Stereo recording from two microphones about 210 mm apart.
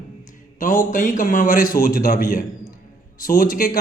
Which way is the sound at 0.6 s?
40° left (ahead or behind).